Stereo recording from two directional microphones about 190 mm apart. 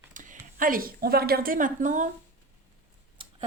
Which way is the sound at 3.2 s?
25° right (ahead or behind).